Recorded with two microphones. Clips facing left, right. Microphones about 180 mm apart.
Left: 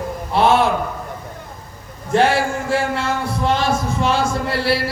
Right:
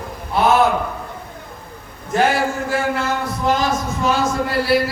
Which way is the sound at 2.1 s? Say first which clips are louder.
Left 1 dB; 30° left (ahead or behind).